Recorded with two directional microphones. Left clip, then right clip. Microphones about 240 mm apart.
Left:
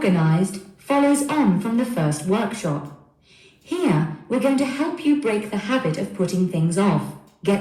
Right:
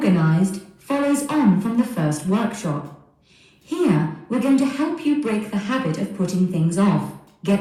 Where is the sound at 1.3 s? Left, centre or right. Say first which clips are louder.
Right 1 dB; centre.